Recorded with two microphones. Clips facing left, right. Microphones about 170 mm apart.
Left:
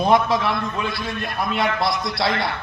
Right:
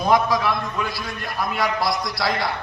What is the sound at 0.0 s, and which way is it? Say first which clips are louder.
A man's voice: left 1 dB; 25° left (ahead or behind).